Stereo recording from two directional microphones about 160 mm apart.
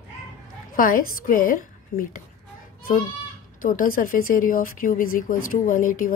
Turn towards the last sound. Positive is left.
turn(degrees=55)  # may be behind; listen again after turning